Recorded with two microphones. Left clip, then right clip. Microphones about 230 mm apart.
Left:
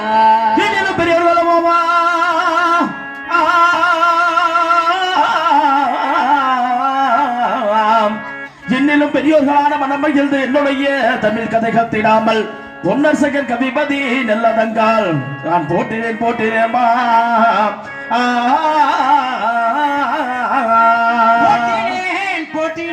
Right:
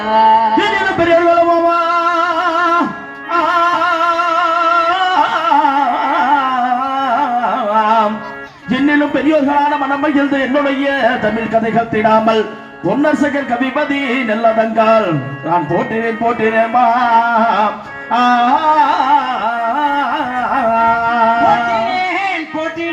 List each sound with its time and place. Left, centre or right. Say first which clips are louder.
0.1 s music: right 1 dB; left
3.3 s music: left 1 dB; left
6.9 s carnatic music: left 1 dB; left
8.7 s a sound: even; left
11.7 s a man's voice: even; left
18.1 s music: right 3 dB; left
19.8 s carnatic music: even; left